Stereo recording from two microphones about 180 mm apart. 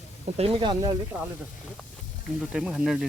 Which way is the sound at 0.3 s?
30° right (ahead or behind).